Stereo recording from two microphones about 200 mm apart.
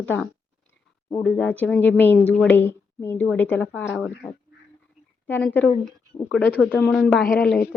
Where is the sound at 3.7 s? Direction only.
5° right (ahead or behind).